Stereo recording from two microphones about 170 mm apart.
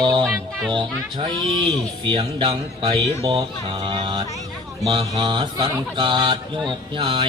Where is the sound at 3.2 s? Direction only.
30° right (ahead or behind).